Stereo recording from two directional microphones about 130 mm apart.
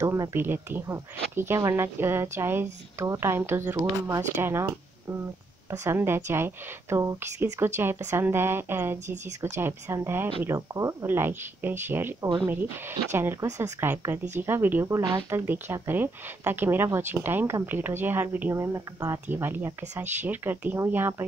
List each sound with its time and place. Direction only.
0.0 s speech: 20° right (ahead or behind)